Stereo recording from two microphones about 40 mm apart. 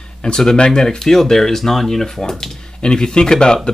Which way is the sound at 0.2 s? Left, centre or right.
Centre.